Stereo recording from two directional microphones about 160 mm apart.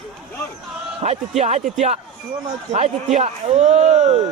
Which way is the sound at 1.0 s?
45° right (ahead or behind).